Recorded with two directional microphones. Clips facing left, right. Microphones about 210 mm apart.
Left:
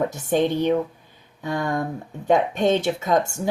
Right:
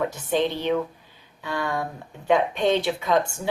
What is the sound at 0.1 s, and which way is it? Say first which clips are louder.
A woman's voice: left 3 dB; 45° left (ahead or behind).